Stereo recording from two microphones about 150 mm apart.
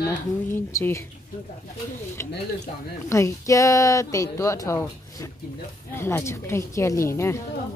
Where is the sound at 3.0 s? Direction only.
20° left (ahead or behind).